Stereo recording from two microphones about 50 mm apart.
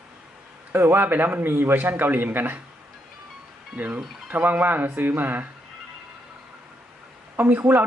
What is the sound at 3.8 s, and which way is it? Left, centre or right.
Speech, right.